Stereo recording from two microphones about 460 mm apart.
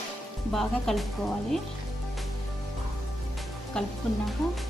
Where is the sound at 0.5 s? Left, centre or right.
Centre.